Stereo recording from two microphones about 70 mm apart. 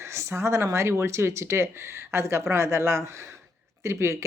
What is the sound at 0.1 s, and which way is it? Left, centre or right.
Speech, right.